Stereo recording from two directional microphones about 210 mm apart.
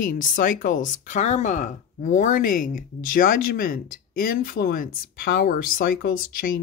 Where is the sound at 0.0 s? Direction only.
40° left (ahead or behind).